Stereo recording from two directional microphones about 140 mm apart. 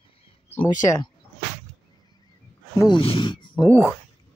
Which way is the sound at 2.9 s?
40° left (ahead or behind).